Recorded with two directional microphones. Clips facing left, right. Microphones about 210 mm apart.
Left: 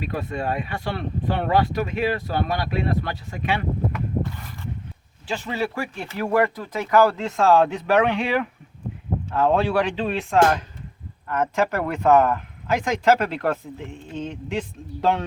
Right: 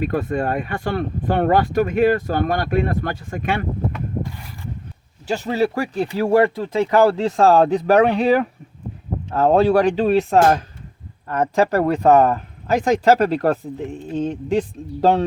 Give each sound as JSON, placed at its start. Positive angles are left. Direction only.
{"t": 0.0, "sound": "speech", "side_deg": -50}
{"t": 5.3, "sound": "speech", "side_deg": -40}